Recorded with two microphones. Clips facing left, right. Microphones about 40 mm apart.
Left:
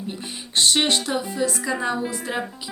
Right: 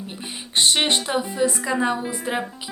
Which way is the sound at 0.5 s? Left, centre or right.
Right.